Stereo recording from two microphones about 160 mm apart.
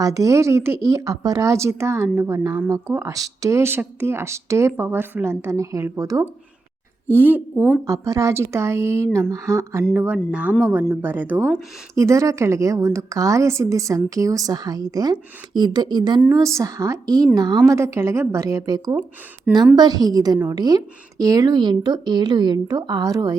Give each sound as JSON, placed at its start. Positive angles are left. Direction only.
{"t": 0.0, "sound": "speech", "side_deg": -20}